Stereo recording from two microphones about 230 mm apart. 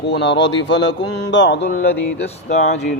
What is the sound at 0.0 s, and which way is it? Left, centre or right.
Mantra, left.